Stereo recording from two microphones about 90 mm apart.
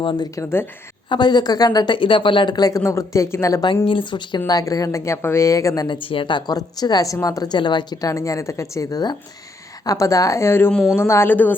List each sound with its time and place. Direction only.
0.0 s speech: 60° left (ahead or behind); by 3.6 s 30° left (ahead or behind)
3.8 s speech: 65° left (ahead or behind); by 6.0 s 45° left (ahead or behind)
6.0 s a woman's voice: 75° left (ahead or behind); by 6.6 s 60° left (ahead or behind)
6.6 s speech: 45° left (ahead or behind)
8.0 s speech: 35° left (ahead or behind); by 11.5 s 20° left (ahead or behind)